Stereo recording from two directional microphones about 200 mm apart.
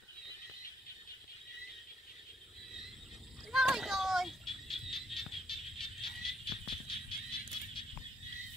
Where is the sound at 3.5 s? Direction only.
Centre (ahead or behind).